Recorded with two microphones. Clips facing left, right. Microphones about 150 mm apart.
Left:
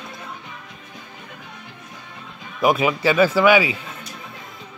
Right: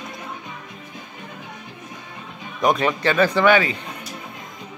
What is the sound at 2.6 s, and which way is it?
Speech, 5° left (ahead or behind).